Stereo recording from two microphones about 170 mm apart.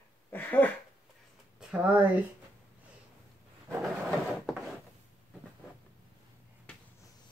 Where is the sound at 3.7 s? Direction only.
5° right (ahead or behind).